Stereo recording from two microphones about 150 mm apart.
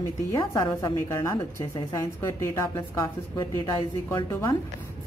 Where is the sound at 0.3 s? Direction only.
25° left (ahead or behind).